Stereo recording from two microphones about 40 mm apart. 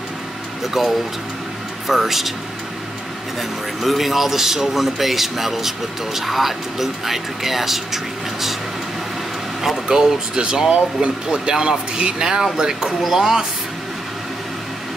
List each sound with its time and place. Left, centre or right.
0.8 s speech: centre
3.3 s speech: centre
9.6 s speech: centre